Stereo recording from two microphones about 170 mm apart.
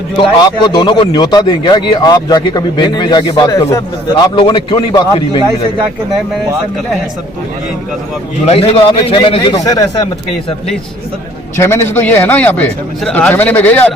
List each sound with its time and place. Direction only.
0.2 s a man's voice: 25° left (ahead or behind)
8.4 s a man's voice: 35° left (ahead or behind)
11.5 s a man's voice: 15° left (ahead or behind)